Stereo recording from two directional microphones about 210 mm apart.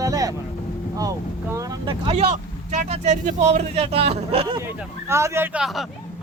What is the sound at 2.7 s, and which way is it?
Speech, 35° right (ahead or behind).